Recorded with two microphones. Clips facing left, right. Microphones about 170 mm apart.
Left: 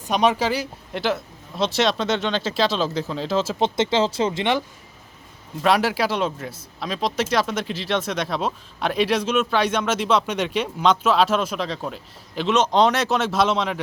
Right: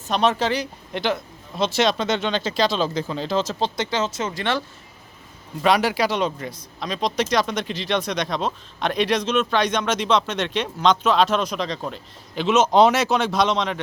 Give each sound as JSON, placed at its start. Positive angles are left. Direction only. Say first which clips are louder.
{"t": 0.1, "sound": "speech", "louder": "left 1 dB", "side_deg": 10}
{"t": 3.6, "sound": "speech", "louder": "left 4 dB", "side_deg": 25}
{"t": 5.6, "sound": "speech", "louder": "even", "side_deg": 0}